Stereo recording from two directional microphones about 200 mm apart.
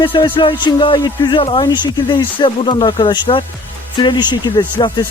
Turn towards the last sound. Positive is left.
turn(degrees=25)  # may be behind; listen again after turning